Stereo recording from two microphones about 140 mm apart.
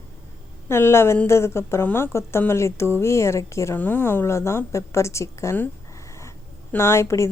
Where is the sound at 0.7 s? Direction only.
15° left (ahead or behind).